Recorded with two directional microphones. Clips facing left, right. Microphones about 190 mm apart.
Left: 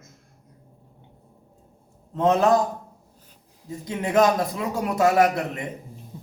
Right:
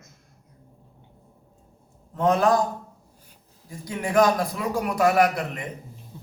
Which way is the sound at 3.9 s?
25° left (ahead or behind).